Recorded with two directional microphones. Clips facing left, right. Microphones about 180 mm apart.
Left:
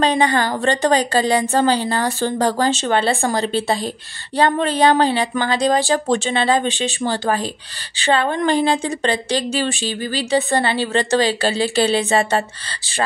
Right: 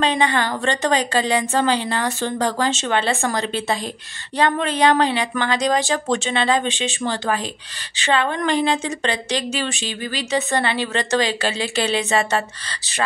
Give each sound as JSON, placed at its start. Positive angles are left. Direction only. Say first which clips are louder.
{"t": 0.0, "sound": "speech", "louder": "left 3 dB", "side_deg": 40}